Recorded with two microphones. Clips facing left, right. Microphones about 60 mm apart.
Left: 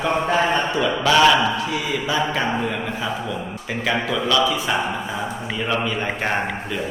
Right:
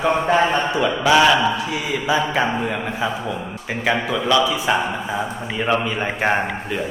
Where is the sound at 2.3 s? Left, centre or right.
Centre.